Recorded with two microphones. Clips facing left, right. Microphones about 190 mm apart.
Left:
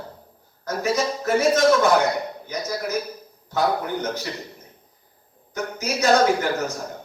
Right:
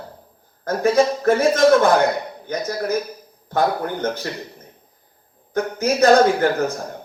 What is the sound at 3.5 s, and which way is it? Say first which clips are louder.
Speech: right 2 dB; 55° right (ahead or behind).